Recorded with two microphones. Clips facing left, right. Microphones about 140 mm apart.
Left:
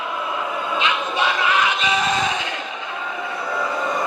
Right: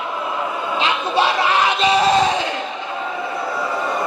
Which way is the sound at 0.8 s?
30° right (ahead or behind).